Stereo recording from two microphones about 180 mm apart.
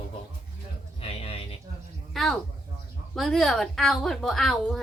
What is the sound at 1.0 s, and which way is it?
Speech, 35° left (ahead or behind).